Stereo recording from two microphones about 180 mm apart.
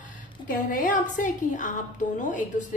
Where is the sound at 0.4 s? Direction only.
50° left (ahead or behind).